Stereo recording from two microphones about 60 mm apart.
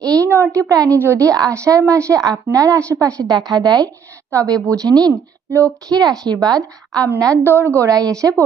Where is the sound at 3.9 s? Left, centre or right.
Right.